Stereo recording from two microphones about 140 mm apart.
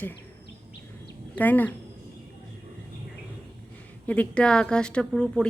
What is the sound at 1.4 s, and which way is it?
Speech, 10° left (ahead or behind).